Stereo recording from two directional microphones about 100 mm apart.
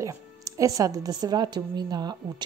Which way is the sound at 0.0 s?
35° right (ahead or behind).